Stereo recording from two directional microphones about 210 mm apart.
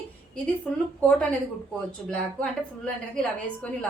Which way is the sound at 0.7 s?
5° left (ahead or behind).